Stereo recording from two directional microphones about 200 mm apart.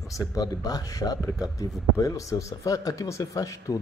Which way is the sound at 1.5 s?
15° left (ahead or behind).